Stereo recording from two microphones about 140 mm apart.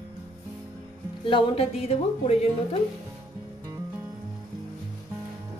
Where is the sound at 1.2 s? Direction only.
40° left (ahead or behind).